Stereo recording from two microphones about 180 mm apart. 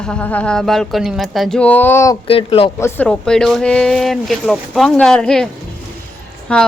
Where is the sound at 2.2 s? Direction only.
30° left (ahead or behind).